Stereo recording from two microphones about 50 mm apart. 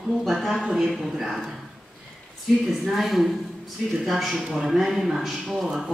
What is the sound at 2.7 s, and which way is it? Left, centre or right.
A woman's voice, centre.